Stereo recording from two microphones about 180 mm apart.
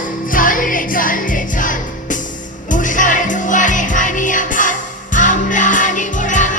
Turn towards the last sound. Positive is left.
turn(degrees=45)  # may be behind; listen again after turning